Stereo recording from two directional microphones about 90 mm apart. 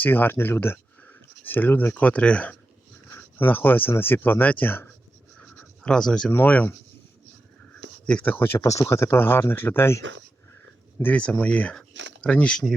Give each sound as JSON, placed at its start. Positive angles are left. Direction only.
{"t": 0.0, "sound": "speech", "side_deg": 20}
{"t": 5.8, "sound": "speech", "side_deg": 5}
{"t": 6.3, "sound": "speech", "side_deg": 20}
{"t": 8.0, "sound": "speech", "side_deg": 15}
{"t": 11.0, "sound": "speech", "side_deg": 15}